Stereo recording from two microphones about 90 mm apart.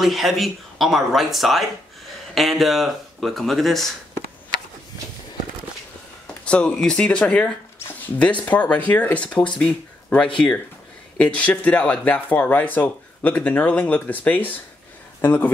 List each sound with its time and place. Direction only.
0.0 s speech: centre (ahead or behind)
6.4 s speech: 10° left (ahead or behind)